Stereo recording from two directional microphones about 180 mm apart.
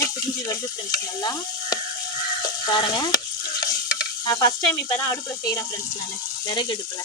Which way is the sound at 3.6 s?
20° left (ahead or behind).